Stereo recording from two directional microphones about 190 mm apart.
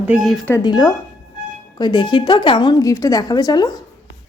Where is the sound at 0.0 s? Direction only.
5° right (ahead or behind).